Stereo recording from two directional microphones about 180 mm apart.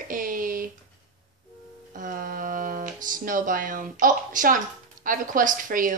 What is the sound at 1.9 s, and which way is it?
Speech, 50° right (ahead or behind).